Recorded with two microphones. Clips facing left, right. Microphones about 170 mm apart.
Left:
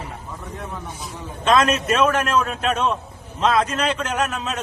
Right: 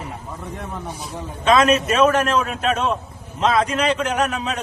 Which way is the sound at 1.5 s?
10° right (ahead or behind).